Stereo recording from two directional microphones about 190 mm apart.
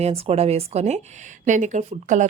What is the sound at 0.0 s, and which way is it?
Speech, 30° right (ahead or behind).